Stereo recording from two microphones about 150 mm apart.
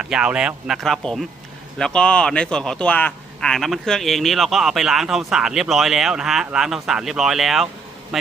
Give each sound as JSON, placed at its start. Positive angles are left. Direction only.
{"t": 0.0, "sound": "a man's voice", "side_deg": -5}